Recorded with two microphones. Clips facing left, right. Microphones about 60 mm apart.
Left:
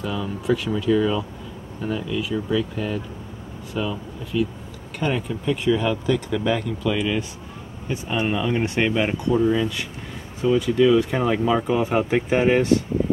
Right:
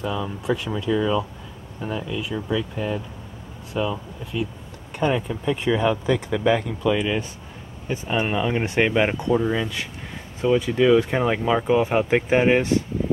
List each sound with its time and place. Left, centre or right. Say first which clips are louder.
0.0 s speech: even; centre
8.1 s speech: even; centre